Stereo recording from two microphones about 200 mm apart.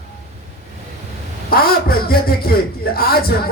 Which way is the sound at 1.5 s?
50° left (ahead or behind).